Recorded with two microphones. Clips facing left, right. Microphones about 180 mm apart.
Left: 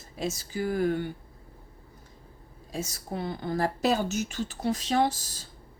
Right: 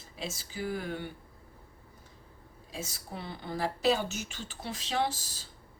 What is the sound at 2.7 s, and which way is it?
A woman's voice, 40° left (ahead or behind).